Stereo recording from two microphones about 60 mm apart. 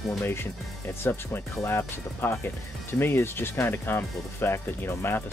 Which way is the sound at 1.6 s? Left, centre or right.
Left.